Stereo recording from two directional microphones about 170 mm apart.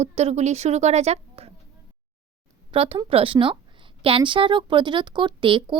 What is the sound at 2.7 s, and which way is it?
A woman's voice, 35° right (ahead or behind).